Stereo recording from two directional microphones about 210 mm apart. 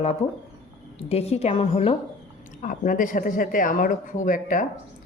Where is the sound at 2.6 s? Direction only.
40° left (ahead or behind).